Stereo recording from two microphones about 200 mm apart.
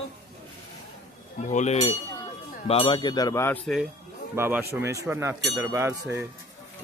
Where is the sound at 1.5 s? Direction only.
35° left (ahead or behind).